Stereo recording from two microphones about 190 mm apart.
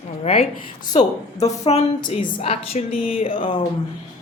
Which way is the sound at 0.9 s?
35° left (ahead or behind).